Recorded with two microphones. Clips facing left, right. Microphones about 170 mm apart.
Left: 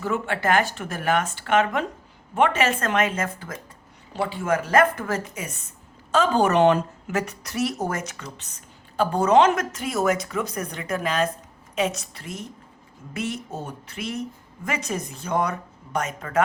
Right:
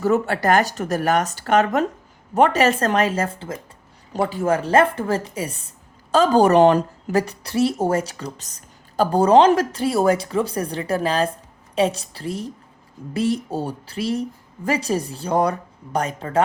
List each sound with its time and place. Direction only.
0.0 s a woman's voice: 40° right (ahead or behind)
4.1 s a woman's voice: 45° right (ahead or behind)